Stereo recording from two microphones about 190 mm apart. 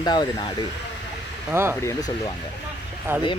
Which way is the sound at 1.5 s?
10° right (ahead or behind).